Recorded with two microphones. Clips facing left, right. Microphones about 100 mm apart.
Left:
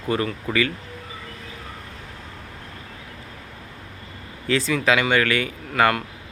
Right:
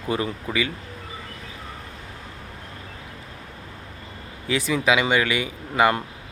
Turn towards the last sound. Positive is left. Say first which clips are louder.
# even
turn(degrees=-15)  # may be behind; listen again after turning